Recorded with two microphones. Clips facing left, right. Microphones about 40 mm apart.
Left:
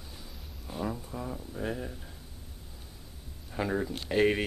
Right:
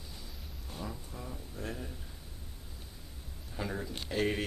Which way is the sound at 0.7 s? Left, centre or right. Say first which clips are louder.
Left 8 dB; centre.